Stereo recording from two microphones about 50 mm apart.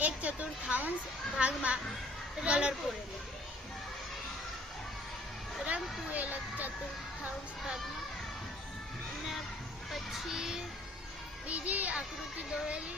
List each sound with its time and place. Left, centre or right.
0.0 s a woman's voice: right
5.6 s speech: right
10.3 s music: centre
11.4 s speech: right